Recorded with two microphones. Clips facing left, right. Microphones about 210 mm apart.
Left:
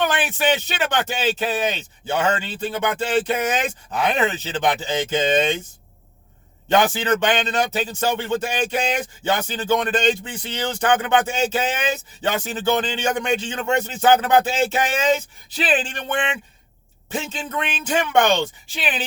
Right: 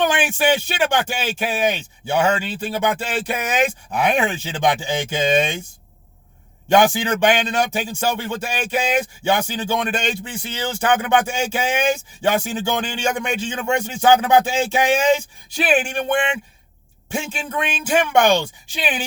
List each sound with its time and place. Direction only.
0.1 s speech: 15° right (ahead or behind)
6.7 s speech: 15° right (ahead or behind)